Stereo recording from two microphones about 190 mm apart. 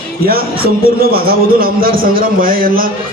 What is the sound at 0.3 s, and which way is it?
A man's voice, 50° right (ahead or behind).